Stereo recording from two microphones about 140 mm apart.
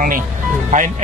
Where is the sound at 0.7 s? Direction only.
60° right (ahead or behind).